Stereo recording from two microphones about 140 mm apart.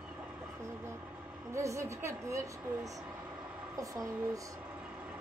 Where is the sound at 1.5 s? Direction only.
20° right (ahead or behind).